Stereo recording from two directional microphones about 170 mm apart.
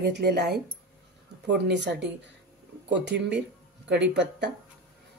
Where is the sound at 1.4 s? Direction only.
90° right.